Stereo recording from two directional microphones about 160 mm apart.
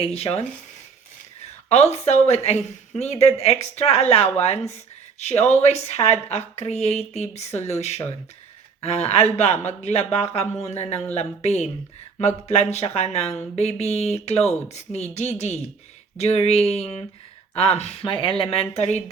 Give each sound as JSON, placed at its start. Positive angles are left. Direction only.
{"t": 0.0, "sound": "speech", "side_deg": 40}
{"t": 1.7, "sound": "speech", "side_deg": 40}